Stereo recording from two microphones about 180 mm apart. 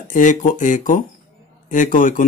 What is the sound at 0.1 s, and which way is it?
Speech, 45° left (ahead or behind).